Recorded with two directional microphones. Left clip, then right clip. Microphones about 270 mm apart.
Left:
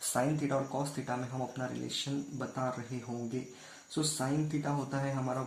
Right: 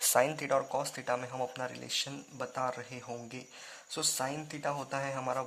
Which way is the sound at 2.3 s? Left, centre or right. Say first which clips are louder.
Right 4 dB; right.